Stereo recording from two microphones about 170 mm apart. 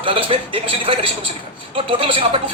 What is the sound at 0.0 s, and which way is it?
Speech, 30° right (ahead or behind).